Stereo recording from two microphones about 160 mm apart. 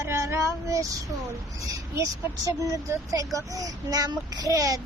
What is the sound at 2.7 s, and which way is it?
A child's voice, 20° right (ahead or behind).